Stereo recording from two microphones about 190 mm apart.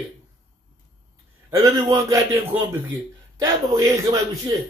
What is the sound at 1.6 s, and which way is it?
A man's voice, 15° right (ahead or behind).